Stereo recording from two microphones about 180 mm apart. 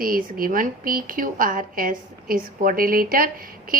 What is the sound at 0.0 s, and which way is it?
A woman's voice, 55° right (ahead or behind).